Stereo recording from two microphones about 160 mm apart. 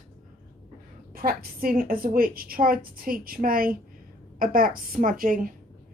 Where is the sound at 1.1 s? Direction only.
65° right (ahead or behind).